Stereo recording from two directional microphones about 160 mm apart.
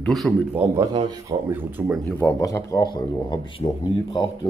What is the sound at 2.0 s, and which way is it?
Speech, 15° left (ahead or behind).